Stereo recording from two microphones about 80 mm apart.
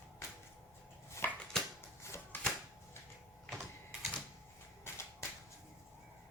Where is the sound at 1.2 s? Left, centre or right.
Left.